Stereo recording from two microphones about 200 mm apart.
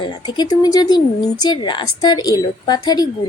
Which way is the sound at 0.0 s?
20° left (ahead or behind).